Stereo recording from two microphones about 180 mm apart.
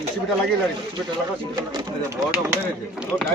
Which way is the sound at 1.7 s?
20° right (ahead or behind).